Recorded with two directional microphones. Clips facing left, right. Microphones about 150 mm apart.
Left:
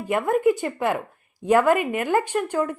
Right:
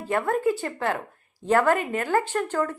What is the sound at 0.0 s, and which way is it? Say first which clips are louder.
A woman's voice: left 3 dB; 15° left (ahead or behind).